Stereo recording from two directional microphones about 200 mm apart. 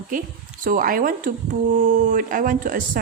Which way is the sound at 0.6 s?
45° right (ahead or behind).